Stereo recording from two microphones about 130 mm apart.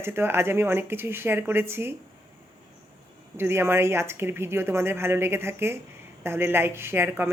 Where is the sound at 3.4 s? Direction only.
20° right (ahead or behind).